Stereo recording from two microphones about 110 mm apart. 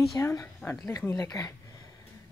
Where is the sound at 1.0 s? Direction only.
20° left (ahead or behind).